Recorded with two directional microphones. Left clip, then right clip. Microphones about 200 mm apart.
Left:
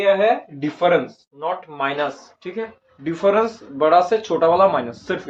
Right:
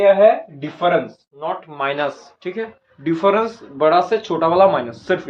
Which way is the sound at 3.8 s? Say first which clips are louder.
Even; 15° right (ahead or behind).